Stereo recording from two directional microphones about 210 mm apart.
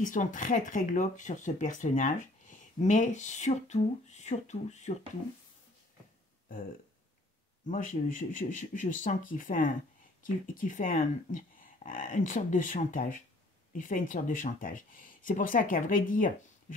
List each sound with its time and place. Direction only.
0.0 s speech: 40° left (ahead or behind)
7.6 s speech: 40° left (ahead or behind)